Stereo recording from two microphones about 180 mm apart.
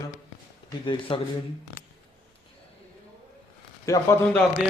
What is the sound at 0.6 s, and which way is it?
Speech, 25° left (ahead or behind).